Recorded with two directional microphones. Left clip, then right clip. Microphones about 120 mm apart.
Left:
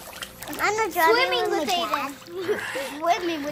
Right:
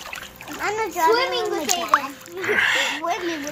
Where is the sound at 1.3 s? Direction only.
40° left (ahead or behind).